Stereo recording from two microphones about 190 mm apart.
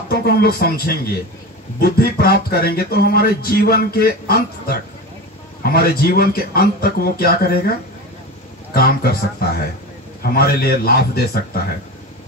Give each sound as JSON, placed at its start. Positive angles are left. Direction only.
{"t": 0.1, "sound": "a man's voice", "side_deg": 55}
{"t": 8.7, "sound": "a man's voice", "side_deg": 55}